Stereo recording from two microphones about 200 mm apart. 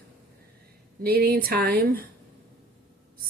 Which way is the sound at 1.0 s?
50° right (ahead or behind).